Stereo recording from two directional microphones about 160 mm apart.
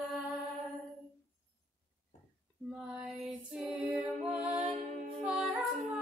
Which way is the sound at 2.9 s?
5° right (ahead or behind).